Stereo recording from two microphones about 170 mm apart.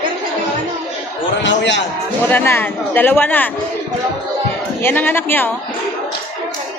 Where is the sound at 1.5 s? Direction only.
90° left.